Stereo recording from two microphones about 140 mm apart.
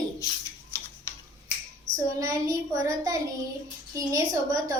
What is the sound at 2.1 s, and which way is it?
A woman's voice, 25° right (ahead or behind).